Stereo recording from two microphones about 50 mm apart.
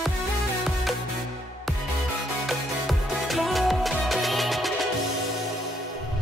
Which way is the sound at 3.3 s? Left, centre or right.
Centre.